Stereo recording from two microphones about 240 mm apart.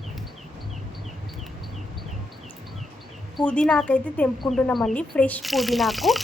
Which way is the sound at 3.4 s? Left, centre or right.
Centre.